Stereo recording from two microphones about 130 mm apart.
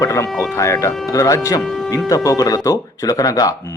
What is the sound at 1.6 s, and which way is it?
Speech, centre (ahead or behind).